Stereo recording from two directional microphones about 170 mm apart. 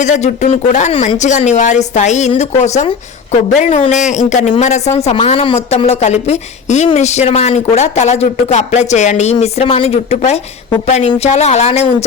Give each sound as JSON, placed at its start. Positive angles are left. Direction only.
{"t": 0.0, "sound": "speech", "side_deg": 45}